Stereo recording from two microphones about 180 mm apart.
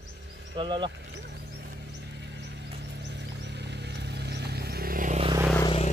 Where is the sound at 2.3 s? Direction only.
70° right (ahead or behind); by 5.2 s 50° right (ahead or behind).